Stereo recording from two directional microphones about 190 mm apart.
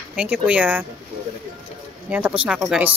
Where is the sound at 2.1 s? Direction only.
10° right (ahead or behind).